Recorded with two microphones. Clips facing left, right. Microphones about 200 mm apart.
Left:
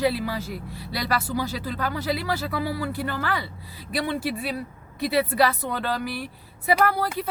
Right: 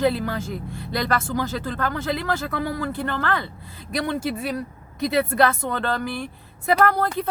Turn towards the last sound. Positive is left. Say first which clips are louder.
# right 3 dB
turn(degrees=5)  # may be behind; listen again after turning